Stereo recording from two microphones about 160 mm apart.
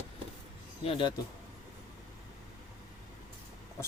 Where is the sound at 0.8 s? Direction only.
30° left (ahead or behind).